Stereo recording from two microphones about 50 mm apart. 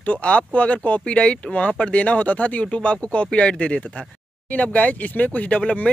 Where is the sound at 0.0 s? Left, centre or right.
Left.